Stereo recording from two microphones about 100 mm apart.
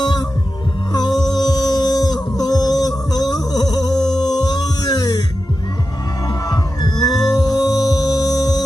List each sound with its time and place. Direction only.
0.0 s heart sounds: 40° left (ahead or behind)
0.9 s music: 40° left (ahead or behind)
6.2 s music: 40° left (ahead or behind)